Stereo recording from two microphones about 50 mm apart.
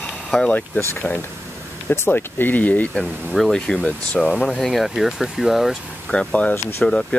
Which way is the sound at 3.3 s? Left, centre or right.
Centre.